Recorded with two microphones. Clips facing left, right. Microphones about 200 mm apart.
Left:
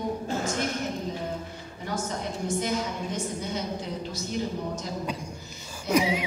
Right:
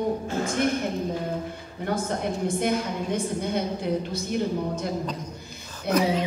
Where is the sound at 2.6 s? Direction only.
60° right (ahead or behind).